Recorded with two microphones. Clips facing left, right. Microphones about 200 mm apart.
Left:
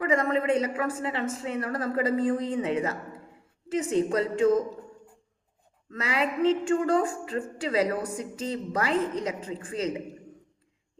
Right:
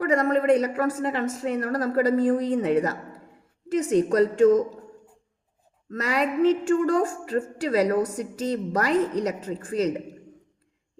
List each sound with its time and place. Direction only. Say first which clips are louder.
0.0 s a woman's voice: right 4 dB; 40° right (ahead or behind)
5.9 s speech: right 3 dB; 40° right (ahead or behind)